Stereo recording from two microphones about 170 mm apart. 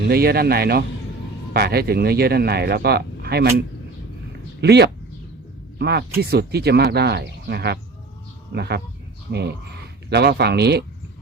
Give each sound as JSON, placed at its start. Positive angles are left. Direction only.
{"t": 0.0, "sound": "speech", "side_deg": -65}
{"t": 4.6, "sound": "speech", "side_deg": -75}